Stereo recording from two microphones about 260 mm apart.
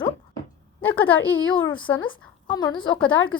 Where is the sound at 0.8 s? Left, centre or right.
Centre.